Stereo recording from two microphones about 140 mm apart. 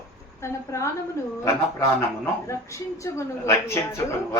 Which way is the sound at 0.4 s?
20° left (ahead or behind).